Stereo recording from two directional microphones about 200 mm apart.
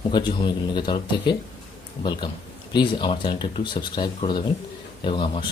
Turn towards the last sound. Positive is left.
turn(degrees=25)  # may be behind; listen again after turning